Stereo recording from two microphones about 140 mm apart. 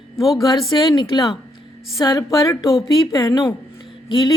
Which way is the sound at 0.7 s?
30° left (ahead or behind).